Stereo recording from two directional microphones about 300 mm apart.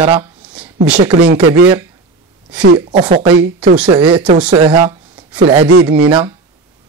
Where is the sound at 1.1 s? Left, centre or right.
Right.